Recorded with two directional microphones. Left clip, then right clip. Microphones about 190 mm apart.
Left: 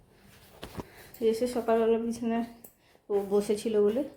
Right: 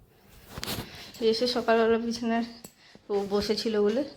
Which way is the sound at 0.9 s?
Centre (ahead or behind).